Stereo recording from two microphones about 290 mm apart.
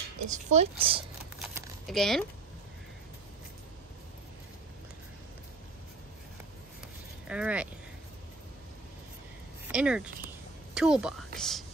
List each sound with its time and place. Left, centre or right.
0.3 s speech: right
1.4 s a sound: centre
7.2 s speech: centre
9.7 s speech: centre